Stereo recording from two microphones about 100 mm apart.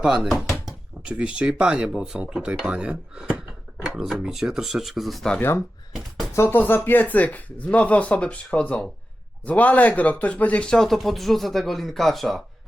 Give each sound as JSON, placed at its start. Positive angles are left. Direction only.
{"t": 0.0, "sound": "speech", "side_deg": -5}
{"t": 5.4, "sound": "speech", "side_deg": 25}
{"t": 5.9, "sound": "a sound", "side_deg": 0}
{"t": 6.3, "sound": "speech", "side_deg": 25}